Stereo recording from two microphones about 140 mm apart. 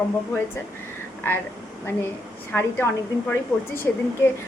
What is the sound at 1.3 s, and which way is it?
Speech, 15° left (ahead or behind).